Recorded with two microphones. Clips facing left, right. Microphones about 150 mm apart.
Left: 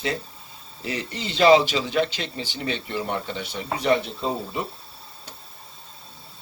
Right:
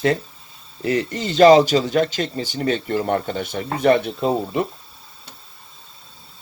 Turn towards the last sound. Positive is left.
turn(degrees=-65)  # may be behind; listen again after turning